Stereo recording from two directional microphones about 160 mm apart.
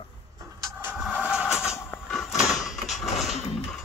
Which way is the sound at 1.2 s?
5° right (ahead or behind).